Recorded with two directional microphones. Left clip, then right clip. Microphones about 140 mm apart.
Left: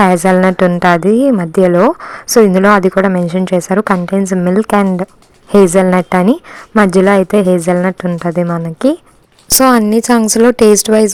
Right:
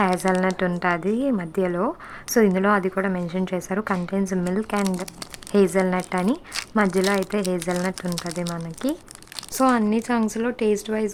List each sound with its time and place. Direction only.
0.0 s a woman's voice: 40° left (ahead or behind)
2.3 s speech: 40° left (ahead or behind)
9.6 s a woman's voice: 60° left (ahead or behind)